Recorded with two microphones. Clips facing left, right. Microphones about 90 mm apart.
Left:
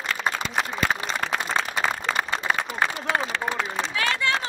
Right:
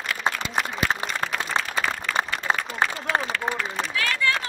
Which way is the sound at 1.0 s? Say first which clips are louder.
Left 1 dB; 25° left (ahead or behind).